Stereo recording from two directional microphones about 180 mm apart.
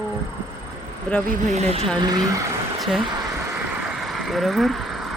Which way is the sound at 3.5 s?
5° right (ahead or behind).